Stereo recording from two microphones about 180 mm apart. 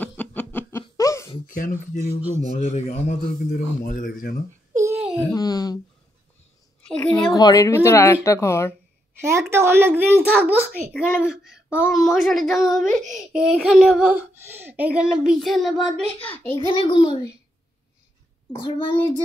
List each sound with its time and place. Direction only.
0.0 s laughter: 10° left (ahead or behind)
1.5 s speech: 50° left (ahead or behind)
2.0 s a child's voice: 15° right (ahead or behind)
2.5 s speech: 40° left (ahead or behind)
5.3 s a child's voice: 20° left (ahead or behind)
6.9 s a child's voice: 5° left (ahead or behind)
7.3 s speech: 20° left (ahead or behind)
9.1 s a child's voice: 15° right (ahead or behind); by 15.9 s centre (ahead or behind)
16.5 s a child's voice: 25° left (ahead or behind)
18.5 s a child's voice: 25° left (ahead or behind)